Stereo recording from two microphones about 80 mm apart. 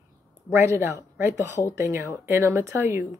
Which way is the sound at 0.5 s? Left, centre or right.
Right.